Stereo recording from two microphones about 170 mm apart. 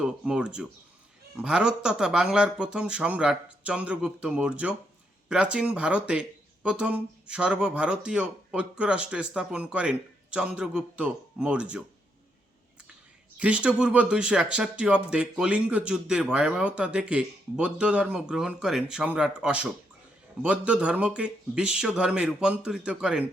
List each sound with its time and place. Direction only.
0.0 s speech: 5° right (ahead or behind)
13.4 s speech: 5° right (ahead or behind)